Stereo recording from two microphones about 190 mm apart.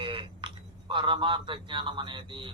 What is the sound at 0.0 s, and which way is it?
A man's voice, 25° right (ahead or behind).